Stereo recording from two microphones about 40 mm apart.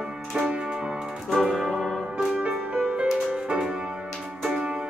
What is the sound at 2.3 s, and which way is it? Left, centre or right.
Music, right.